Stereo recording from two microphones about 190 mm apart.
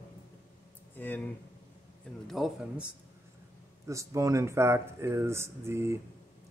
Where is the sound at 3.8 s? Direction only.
15° right (ahead or behind).